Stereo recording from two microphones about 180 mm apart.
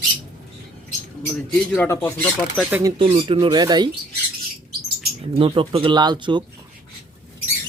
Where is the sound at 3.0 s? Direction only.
30° right (ahead or behind).